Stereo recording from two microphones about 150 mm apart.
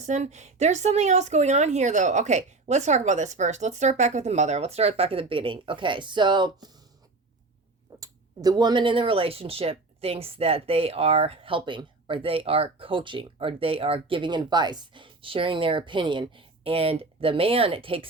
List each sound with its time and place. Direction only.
0.0 s a woman's voice: 50° right (ahead or behind); by 6.7 s 30° right (ahead or behind)
7.9 s speech: 25° right (ahead or behind)